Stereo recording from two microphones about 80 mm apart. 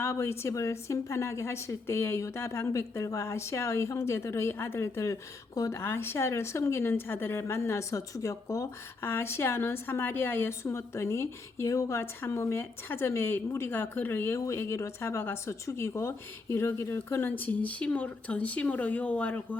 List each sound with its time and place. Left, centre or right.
0.0 s a woman's voice: left
5.8 s a woman's voice: left
14.3 s speech: left; by 19.5 s centre